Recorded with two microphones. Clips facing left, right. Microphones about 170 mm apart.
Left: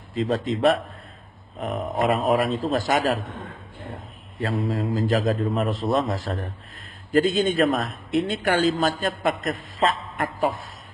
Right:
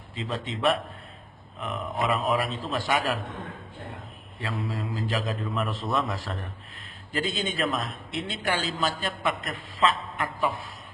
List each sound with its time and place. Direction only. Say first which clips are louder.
0.1 s a man's voice: left 9 dB; 40° left (ahead or behind)
4.4 s a man's voice: left 7 dB; 40° left (ahead or behind)
7.1 s a man's voice: left 10 dB; 50° left (ahead or behind)